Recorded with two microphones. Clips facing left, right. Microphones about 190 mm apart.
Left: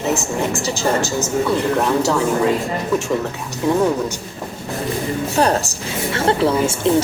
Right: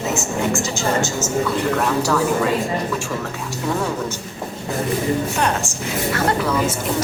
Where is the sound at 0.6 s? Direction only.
35° left (ahead or behind).